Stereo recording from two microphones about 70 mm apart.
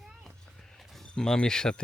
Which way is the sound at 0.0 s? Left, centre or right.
Centre.